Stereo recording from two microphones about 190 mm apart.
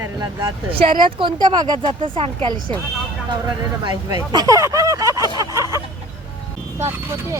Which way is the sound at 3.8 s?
20° right (ahead or behind).